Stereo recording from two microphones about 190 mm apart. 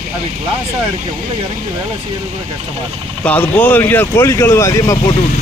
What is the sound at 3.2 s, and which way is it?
Speech, 10° left (ahead or behind).